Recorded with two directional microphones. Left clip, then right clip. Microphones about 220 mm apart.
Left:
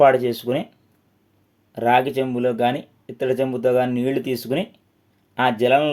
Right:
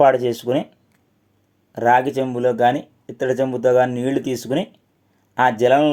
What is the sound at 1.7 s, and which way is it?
Speech, 25° right (ahead or behind).